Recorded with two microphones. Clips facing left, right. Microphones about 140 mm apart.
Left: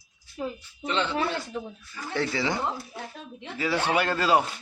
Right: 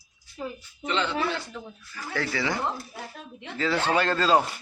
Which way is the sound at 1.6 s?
20° left (ahead or behind).